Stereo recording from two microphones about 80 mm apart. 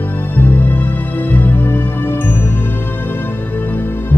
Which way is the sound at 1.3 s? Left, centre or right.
Left.